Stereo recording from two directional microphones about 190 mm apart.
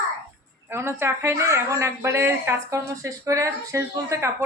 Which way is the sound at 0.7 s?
15° right (ahead or behind).